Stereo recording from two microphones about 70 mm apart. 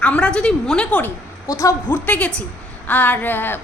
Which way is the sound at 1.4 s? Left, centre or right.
Left.